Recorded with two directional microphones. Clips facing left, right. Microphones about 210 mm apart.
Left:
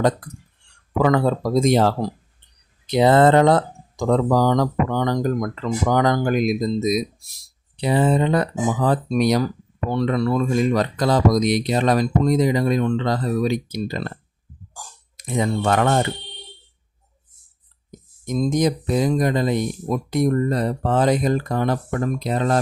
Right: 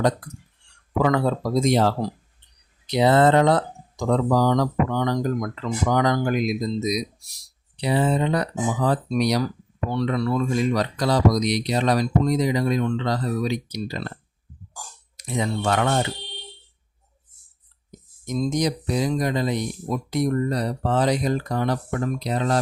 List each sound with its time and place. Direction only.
1.0 s speech: 50° left (ahead or behind)
2.9 s speech: 50° left (ahead or behind)
15.1 s speech: 50° left (ahead or behind)
17.9 s speech: 50° left (ahead or behind)